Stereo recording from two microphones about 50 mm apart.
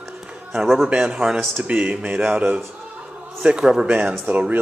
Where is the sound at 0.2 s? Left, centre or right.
Centre.